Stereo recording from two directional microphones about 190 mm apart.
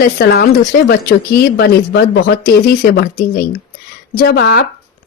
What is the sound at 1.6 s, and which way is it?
A woman's voice, 55° left (ahead or behind).